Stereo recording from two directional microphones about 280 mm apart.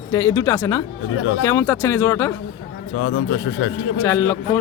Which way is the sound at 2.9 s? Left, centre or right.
Left.